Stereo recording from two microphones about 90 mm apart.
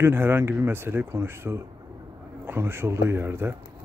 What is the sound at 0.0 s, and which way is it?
Speech, 25° right (ahead or behind).